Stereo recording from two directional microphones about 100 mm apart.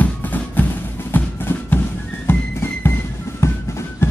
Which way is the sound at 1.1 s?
20° left (ahead or behind).